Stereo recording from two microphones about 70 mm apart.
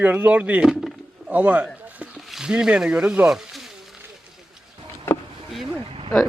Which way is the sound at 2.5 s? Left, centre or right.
Centre.